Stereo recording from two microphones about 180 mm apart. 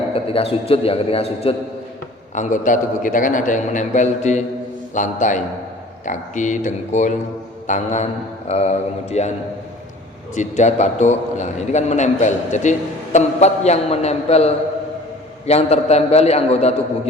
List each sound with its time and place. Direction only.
0.1 s a man's voice: 30° left (ahead or behind)
2.3 s a man's voice: 45° left (ahead or behind)
10.3 s a man's voice: 40° left (ahead or behind)